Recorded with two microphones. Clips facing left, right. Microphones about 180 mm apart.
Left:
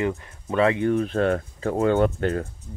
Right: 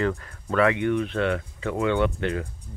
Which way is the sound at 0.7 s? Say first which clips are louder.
Left 2 dB; 35° left (ahead or behind).